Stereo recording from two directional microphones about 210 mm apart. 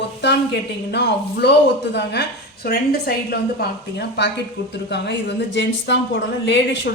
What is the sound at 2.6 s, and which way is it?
A woman's voice, 45° left (ahead or behind).